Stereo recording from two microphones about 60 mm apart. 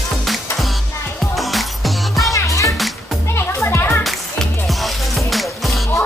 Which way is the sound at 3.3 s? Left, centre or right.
Left.